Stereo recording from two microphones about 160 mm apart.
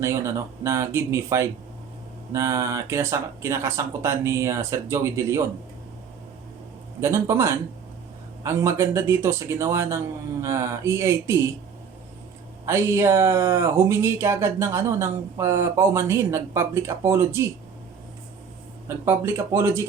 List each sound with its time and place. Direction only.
0.0 s speech: 15° right (ahead or behind)
7.0 s speech: 15° right (ahead or behind)
12.6 s speech: 15° right (ahead or behind)
19.0 s speech: 15° right (ahead or behind)